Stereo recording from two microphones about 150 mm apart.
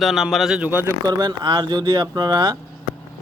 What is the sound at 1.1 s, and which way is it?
Speech, 25° right (ahead or behind).